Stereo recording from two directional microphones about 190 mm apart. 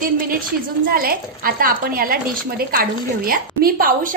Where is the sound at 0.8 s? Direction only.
50° right (ahead or behind).